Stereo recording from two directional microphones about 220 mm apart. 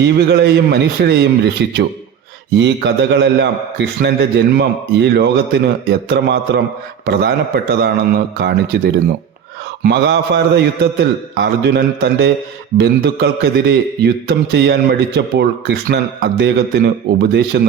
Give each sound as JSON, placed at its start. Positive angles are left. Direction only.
{"t": 0.0, "sound": "a man's voice", "side_deg": -50}
{"t": 9.8, "sound": "a man's voice", "side_deg": -50}